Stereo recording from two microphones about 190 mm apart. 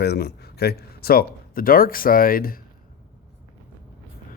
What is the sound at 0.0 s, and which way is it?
Speech, 60° left (ahead or behind).